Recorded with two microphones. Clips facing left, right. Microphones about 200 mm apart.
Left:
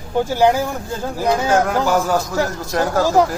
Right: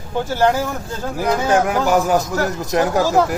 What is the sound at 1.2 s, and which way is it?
Speech, 15° right (ahead or behind).